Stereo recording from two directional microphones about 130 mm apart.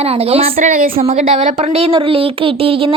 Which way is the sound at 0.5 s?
90° right.